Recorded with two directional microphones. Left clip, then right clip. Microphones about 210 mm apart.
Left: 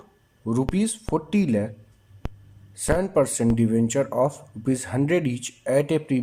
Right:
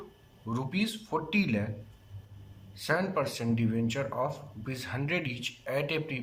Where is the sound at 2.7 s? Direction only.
35° left (ahead or behind).